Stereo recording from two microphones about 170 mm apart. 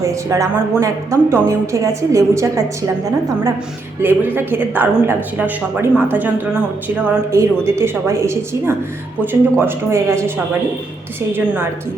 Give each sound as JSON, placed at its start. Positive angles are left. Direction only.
{"t": 0.0, "sound": "a woman's voice", "side_deg": -15}
{"t": 4.0, "sound": "a woman's voice", "side_deg": -10}